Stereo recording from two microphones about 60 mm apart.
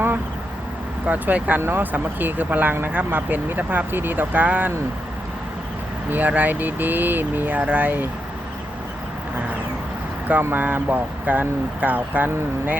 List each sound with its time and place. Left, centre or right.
1.0 s speech: right
6.1 s speech: right
10.4 s speech: right